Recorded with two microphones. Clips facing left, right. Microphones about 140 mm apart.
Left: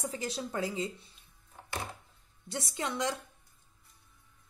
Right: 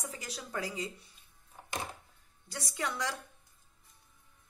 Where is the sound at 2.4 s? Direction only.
25° left (ahead or behind).